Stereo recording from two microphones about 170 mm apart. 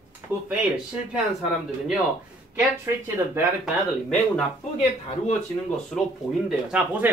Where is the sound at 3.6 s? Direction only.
Centre (ahead or behind).